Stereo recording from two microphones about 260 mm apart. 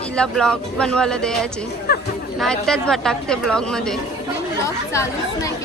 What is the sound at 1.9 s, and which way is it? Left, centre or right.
Speech, left.